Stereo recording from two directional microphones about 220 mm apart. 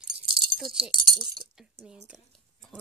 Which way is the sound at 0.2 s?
20° right (ahead or behind).